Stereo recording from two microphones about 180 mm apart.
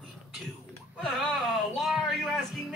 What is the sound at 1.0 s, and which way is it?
Speech, centre (ahead or behind).